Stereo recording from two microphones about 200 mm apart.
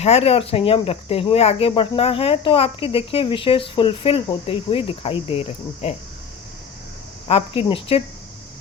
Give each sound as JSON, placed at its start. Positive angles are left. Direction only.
{"t": 0.0, "sound": "speech", "side_deg": 30}
{"t": 7.3, "sound": "speech", "side_deg": 30}